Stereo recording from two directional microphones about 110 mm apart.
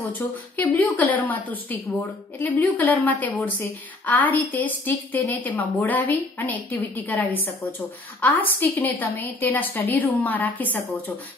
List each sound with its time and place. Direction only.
0.6 s a woman's voice: 15° left (ahead or behind)